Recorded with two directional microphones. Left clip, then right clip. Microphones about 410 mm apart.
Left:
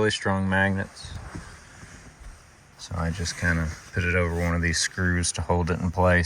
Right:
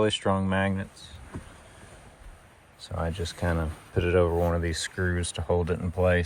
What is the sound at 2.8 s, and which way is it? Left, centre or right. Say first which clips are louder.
Speech: left 1 dB; centre.